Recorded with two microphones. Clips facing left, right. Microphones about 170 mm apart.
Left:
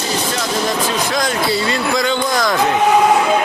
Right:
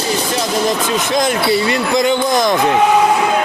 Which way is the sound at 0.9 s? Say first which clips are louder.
Right 3 dB; 20° right (ahead or behind).